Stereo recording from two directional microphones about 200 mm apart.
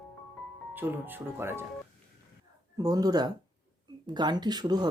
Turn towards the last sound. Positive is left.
turn(degrees=-20)  # may be behind; listen again after turning